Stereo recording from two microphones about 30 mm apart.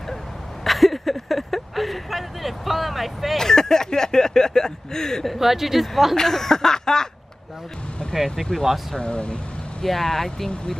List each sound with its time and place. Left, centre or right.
0.7 s a sound: centre
3.3 s speech: centre
5.4 s speech: centre
6.1 s snicker: centre
9.1 s speech: left
9.8 s snicker: centre